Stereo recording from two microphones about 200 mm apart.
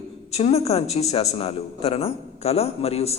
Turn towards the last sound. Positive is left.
turn(degrees=30)  # may be behind; listen again after turning